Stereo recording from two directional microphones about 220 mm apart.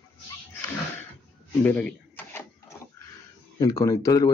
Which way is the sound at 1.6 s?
5° left (ahead or behind).